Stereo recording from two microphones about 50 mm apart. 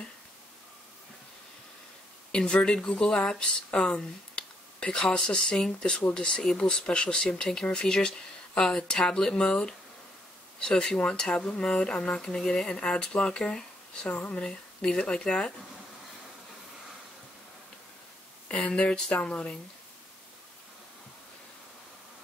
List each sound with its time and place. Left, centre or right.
2.3 s speech: centre
18.5 s speech: left